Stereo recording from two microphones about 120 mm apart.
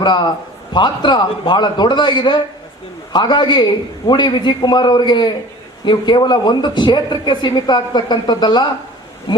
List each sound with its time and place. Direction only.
0.0 s speech: 40° left (ahead or behind)